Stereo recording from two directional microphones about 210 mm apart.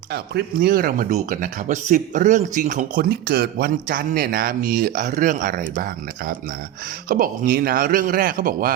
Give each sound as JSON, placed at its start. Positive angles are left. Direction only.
{"t": 0.1, "sound": "speech", "side_deg": -50}